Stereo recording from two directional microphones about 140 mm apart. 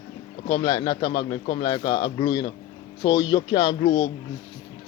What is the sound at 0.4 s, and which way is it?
Speech, 35° left (ahead or behind).